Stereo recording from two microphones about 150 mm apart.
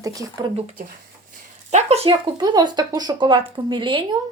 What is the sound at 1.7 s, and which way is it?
Speech, 45° right (ahead or behind).